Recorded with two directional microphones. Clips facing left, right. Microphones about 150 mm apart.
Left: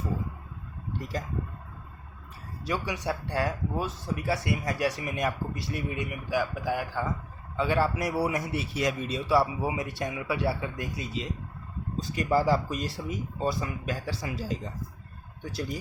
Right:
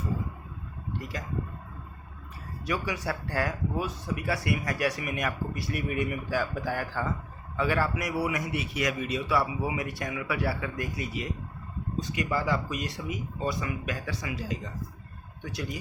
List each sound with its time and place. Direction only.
2.6 s a man's voice: 25° left (ahead or behind)
11.9 s speech: 35° left (ahead or behind)